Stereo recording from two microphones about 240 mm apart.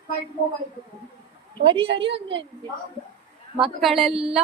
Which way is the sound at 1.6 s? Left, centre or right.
Right.